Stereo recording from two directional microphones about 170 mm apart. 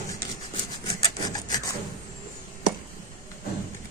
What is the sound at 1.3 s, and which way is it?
Filing, 20° left (ahead or behind).